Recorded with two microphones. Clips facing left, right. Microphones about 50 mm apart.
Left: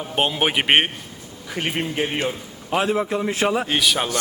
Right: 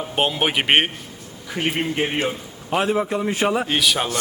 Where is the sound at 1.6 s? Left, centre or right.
Centre.